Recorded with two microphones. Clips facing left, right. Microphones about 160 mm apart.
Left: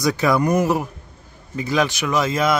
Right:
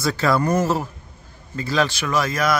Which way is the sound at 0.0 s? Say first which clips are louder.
Left 2 dB; 15° left (ahead or behind).